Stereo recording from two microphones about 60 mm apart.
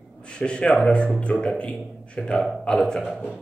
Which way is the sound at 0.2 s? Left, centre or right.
Centre.